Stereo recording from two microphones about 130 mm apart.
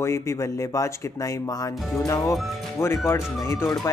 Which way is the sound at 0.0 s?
20° left (ahead or behind).